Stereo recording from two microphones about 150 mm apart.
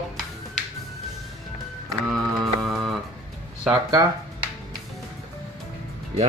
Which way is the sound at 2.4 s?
Centre (ahead or behind).